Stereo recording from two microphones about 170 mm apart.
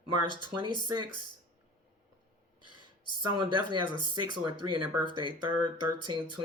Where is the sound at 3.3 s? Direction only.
25° right (ahead or behind).